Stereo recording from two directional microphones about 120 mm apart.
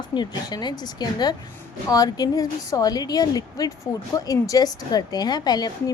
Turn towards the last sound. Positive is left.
turn(degrees=35)  # may be behind; listen again after turning